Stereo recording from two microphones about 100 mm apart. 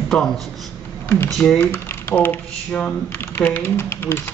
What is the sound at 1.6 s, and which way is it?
Speech, 20° left (ahead or behind).